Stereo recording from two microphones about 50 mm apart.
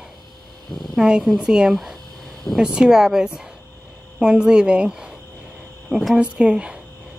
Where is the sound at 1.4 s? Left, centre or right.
Centre.